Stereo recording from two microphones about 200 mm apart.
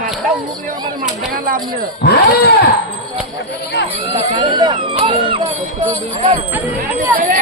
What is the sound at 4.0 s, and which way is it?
Speech, 25° right (ahead or behind).